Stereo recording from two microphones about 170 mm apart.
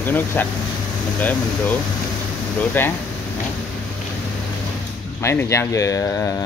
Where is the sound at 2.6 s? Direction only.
10° left (ahead or behind).